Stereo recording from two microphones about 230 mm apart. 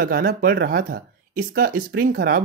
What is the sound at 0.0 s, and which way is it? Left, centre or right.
Speech, right.